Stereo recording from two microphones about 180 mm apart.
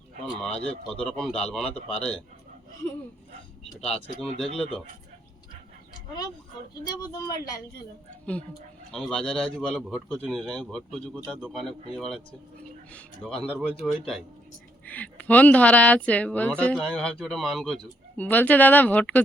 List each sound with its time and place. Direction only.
0.3 s speech: centre (ahead or behind)
3.8 s speech: centre (ahead or behind)
4.4 s speech: 35° left (ahead or behind)
6.8 s speech: 20° left (ahead or behind)
8.9 s speech: 5° left (ahead or behind)